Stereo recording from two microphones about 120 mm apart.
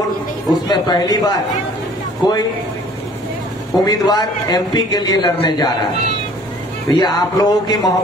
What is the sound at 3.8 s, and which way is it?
A man's voice, 35° left (ahead or behind).